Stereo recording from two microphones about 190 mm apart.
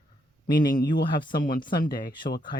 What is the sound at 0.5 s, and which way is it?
Speech, 45° left (ahead or behind).